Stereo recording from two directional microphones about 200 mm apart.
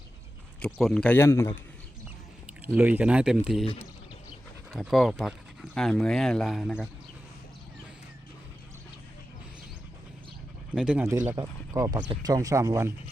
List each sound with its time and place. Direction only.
0.6 s speech: centre (ahead or behind)
2.7 s speech: 5° right (ahead or behind)
3.6 s speech: 30° left (ahead or behind)
4.7 s speech: centre (ahead or behind)
10.8 s speech: 5° right (ahead or behind)